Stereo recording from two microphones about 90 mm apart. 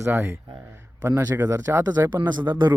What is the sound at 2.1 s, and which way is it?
Speech, 55° right (ahead or behind).